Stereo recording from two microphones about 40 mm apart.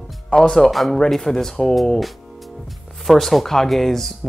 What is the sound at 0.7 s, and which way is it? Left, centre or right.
Speech, centre.